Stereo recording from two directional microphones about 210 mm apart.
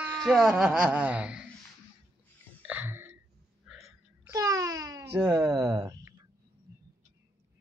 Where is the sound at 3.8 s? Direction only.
15° right (ahead or behind).